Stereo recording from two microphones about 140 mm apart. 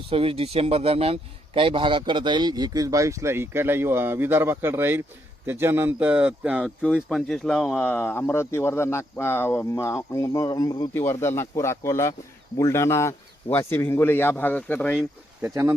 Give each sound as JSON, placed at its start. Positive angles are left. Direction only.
{"t": 0.1, "sound": "a man's voice", "side_deg": -40}
{"t": 7.9, "sound": "a man's voice", "side_deg": 15}
{"t": 15.4, "sound": "a man's voice", "side_deg": -20}